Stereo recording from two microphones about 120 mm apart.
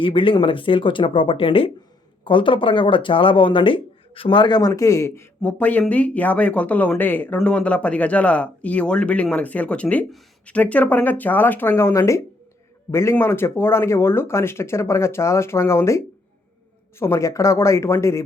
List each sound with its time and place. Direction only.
0.0 s speech: 45° left (ahead or behind)
4.7 s speech: 25° left (ahead or behind)